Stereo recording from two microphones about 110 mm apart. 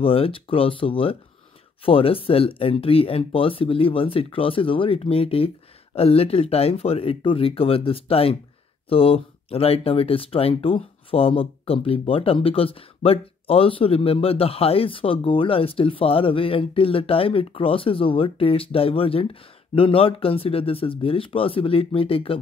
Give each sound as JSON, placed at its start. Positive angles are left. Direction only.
{"t": 0.0, "sound": "speech", "side_deg": 55}